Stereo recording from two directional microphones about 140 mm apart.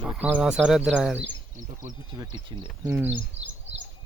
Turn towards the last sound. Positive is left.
turn(degrees=-50)  # may be behind; listen again after turning